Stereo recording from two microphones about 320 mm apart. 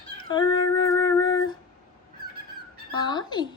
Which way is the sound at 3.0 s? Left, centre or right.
Centre.